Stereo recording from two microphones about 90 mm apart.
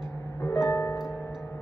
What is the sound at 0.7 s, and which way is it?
Music, 35° left (ahead or behind).